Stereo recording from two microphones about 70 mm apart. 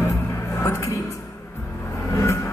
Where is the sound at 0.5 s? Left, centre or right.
Left.